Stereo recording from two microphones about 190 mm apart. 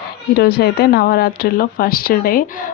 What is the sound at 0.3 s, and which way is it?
Speech, 55° left (ahead or behind).